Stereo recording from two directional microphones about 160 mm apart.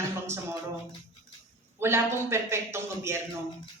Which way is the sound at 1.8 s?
15° right (ahead or behind).